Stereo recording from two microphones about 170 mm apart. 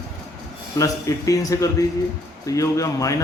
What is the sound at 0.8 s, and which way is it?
Speech, 20° left (ahead or behind).